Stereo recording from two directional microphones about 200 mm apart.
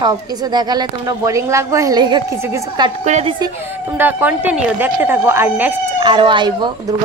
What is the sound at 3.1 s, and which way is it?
Speech, 35° right (ahead or behind).